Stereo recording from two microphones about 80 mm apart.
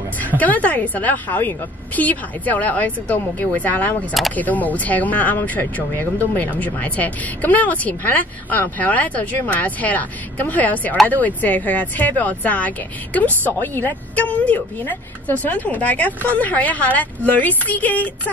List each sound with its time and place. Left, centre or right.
0.4 s speech: centre